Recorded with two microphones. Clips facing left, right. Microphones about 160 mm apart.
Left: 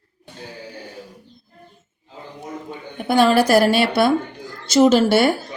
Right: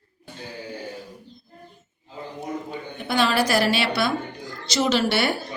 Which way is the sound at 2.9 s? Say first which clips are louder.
Left 7 dB; 50° left (ahead or behind).